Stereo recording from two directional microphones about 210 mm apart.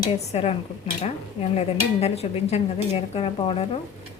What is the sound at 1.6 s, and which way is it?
Speech, 30° left (ahead or behind).